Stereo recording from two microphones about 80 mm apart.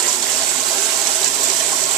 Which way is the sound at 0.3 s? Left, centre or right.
Right.